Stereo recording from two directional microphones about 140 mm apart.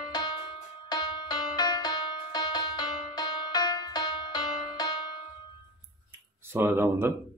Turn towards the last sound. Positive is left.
turn(degrees=-15)  # may be behind; listen again after turning